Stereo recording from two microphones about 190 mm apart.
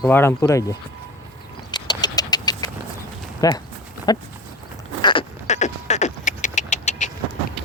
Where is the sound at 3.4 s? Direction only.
20° left (ahead or behind).